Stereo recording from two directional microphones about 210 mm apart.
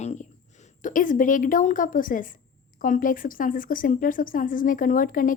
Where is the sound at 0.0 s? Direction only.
35° left (ahead or behind).